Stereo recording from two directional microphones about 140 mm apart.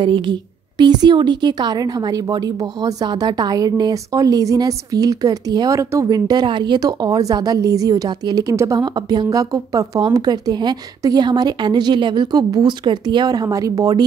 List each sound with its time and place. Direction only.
0.0 s a woman's voice: 35° right (ahead or behind)